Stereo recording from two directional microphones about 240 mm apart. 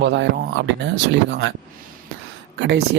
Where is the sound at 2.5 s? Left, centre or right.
Right.